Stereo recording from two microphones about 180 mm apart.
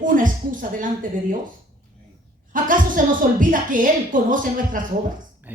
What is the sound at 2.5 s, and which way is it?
A woman's voice, 50° right (ahead or behind).